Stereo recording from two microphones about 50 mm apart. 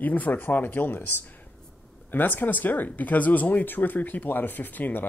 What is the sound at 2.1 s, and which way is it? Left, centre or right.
Speech, left.